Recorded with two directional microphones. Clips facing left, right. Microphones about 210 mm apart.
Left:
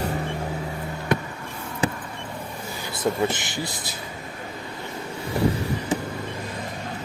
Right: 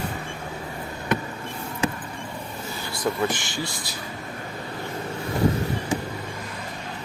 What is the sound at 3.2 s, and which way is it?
Speech, 20° left (ahead or behind).